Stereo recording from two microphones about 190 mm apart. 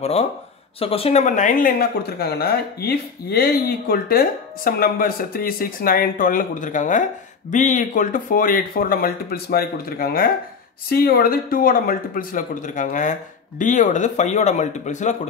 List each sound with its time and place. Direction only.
0.0 s speech: 35° left (ahead or behind)